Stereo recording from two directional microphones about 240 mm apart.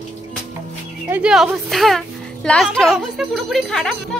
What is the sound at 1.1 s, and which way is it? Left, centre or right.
A child's voice, centre.